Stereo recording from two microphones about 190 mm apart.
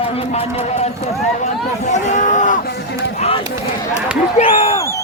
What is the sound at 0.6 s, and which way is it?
Speech, 35° left (ahead or behind).